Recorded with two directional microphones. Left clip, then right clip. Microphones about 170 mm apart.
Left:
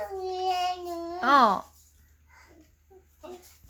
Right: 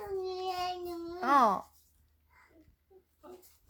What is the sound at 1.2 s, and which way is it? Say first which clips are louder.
Speech: left 5 dB; 5° right (ahead or behind).